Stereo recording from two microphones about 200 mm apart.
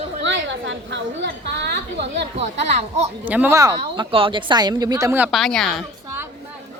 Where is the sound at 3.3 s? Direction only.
10° right (ahead or behind).